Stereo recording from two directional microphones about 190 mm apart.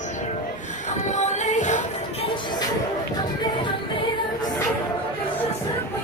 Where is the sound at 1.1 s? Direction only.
40° left (ahead or behind).